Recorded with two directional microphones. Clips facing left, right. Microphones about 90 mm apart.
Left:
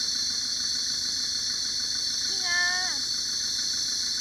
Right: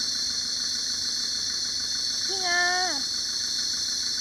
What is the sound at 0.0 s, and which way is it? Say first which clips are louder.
Engine: right 1 dB; 15° right (ahead or behind).